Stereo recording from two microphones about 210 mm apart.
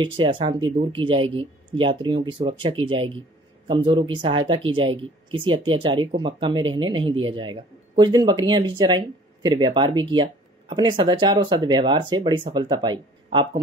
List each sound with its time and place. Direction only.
0.0 s speech: 25° right (ahead or behind)